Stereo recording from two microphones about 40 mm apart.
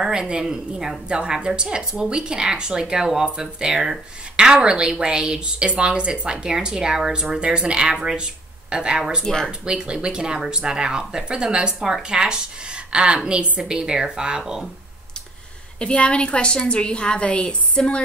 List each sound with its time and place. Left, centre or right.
0.1 s a woman's voice: right
7.9 s a woman's voice: centre
8.2 s speech: right
9.2 s speech: centre
9.5 s speech: right
15.8 s a woman's voice: left